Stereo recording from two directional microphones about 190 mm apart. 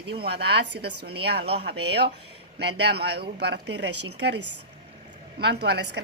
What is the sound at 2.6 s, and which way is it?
A woman's voice, 60° right (ahead or behind).